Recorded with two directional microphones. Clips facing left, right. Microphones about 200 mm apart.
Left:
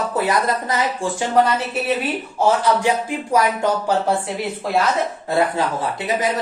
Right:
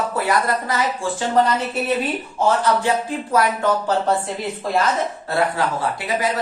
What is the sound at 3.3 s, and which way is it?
Speech, 15° left (ahead or behind).